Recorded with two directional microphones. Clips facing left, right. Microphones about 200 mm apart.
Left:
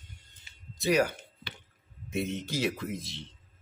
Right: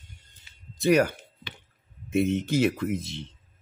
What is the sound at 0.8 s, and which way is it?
Speech, 55° right (ahead or behind).